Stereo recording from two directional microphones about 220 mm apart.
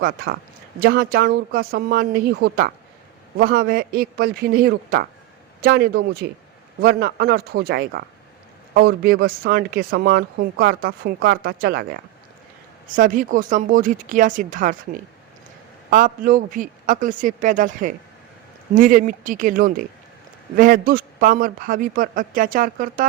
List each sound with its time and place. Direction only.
0.8 s speech: 45° right (ahead or behind)
13.0 s a man's voice: 35° right (ahead or behind)
15.9 s a man's voice: 35° right (ahead or behind)